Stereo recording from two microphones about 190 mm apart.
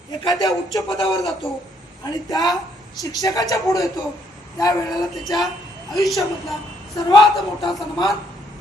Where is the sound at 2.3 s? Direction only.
20° left (ahead or behind).